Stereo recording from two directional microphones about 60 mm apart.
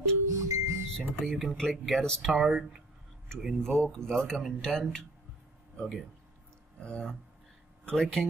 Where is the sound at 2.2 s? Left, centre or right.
Centre.